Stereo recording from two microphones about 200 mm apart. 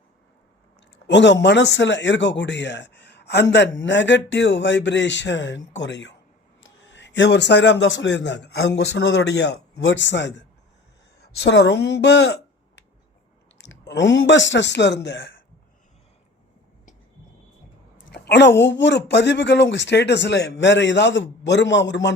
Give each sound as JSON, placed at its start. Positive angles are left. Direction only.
{"t": 1.0, "sound": "a man's voice", "side_deg": 60}
{"t": 17.9, "sound": "a sound", "side_deg": 55}
{"t": 18.6, "sound": "a man's voice", "side_deg": 60}